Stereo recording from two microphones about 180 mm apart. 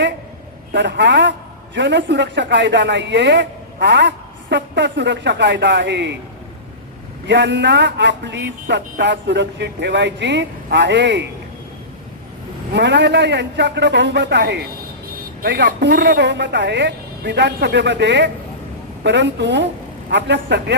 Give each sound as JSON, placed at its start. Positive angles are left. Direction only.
{"t": 0.7, "sound": "a man's voice", "side_deg": -75}
{"t": 7.3, "sound": "a man's voice", "side_deg": -75}
{"t": 12.7, "sound": "a man's voice", "side_deg": -75}